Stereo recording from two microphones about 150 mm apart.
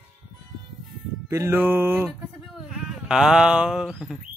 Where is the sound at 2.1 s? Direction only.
Centre (ahead or behind).